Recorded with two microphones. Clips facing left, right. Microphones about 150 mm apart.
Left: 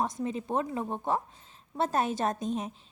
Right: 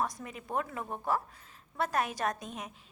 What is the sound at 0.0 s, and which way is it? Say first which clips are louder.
A woman's voice: left 5 dB; 25° left (ahead or behind).